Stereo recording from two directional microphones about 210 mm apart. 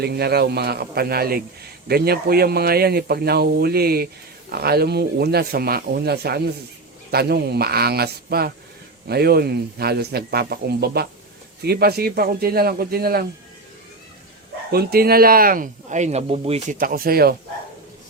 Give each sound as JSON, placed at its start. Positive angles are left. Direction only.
{"t": 0.0, "sound": "speech", "side_deg": -50}
{"t": 14.7, "sound": "speech", "side_deg": -45}
{"t": 16.7, "sound": "speech", "side_deg": -45}